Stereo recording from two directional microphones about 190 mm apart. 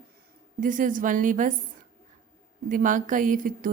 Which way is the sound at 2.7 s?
45° right (ahead or behind).